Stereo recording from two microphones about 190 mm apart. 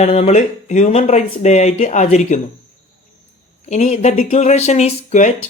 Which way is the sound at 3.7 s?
35° left (ahead or behind).